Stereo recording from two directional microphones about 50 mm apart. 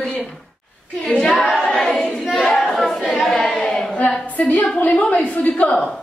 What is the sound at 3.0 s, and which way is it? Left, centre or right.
Speech, centre.